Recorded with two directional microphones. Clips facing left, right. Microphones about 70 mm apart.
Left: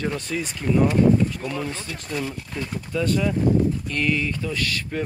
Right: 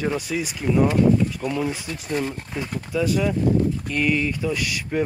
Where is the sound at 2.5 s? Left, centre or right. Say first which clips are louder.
Right 2 dB; centre.